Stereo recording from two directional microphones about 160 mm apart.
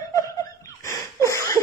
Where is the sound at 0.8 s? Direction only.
20° left (ahead or behind).